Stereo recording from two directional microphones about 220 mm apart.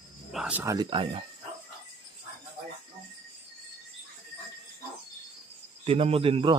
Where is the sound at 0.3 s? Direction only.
5° right (ahead or behind); by 1.2 s 20° right (ahead or behind).